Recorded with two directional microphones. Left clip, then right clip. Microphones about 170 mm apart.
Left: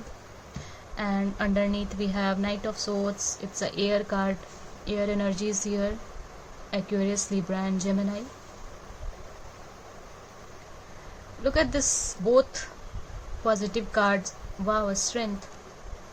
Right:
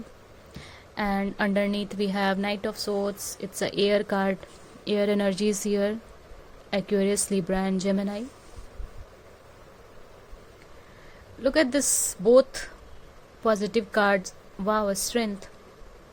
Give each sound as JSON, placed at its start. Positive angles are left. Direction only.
{"t": 0.9, "sound": "speech", "side_deg": -60}
{"t": 11.4, "sound": "speech", "side_deg": -55}